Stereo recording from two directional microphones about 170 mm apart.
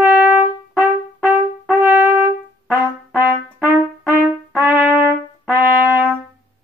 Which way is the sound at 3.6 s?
10° right (ahead or behind).